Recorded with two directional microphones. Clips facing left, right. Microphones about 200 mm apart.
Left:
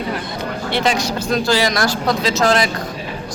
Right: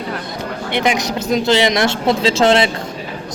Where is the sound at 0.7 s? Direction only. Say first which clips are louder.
Right 1 dB; 20° right (ahead or behind).